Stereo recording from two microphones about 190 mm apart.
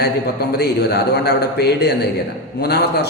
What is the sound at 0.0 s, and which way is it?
A man's voice, 55° left (ahead or behind).